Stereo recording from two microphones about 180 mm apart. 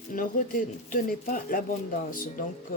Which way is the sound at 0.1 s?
50° left (ahead or behind).